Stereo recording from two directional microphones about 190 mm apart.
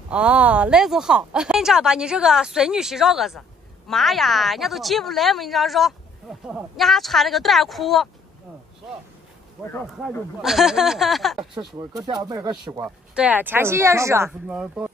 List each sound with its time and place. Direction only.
0.1 s speech: 5° right (ahead or behind)
10.0 s speech: centre (ahead or behind)
11.3 s speech: 20° right (ahead or behind)
12.8 s speech: 5° right (ahead or behind)